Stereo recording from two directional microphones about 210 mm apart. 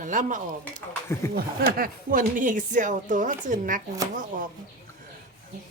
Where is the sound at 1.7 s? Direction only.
45° right (ahead or behind).